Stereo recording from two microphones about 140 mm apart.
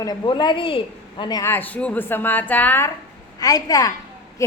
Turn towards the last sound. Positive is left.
turn(degrees=20)  # may be behind; listen again after turning